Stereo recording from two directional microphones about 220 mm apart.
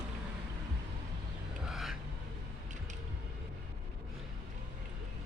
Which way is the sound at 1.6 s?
Centre (ahead or behind).